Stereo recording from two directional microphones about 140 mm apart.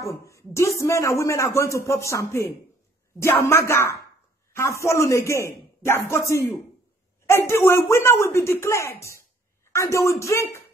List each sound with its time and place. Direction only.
0.0 s speech: 20° left (ahead or behind)